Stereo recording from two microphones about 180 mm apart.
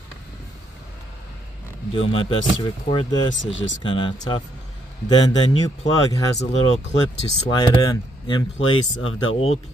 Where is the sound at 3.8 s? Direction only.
25° left (ahead or behind).